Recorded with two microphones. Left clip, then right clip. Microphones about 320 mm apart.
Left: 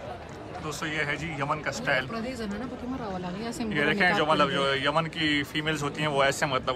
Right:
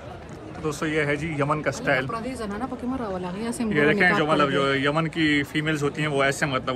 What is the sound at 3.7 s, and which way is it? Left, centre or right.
Speech, centre.